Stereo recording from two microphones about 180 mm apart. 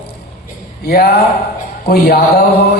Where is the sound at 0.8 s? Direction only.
60° left (ahead or behind).